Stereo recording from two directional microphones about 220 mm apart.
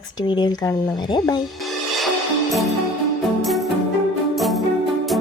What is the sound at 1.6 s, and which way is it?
Music, centre (ahead or behind).